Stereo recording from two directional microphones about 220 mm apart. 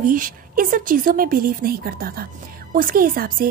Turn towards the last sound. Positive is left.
turn(degrees=-40)  # may be behind; listen again after turning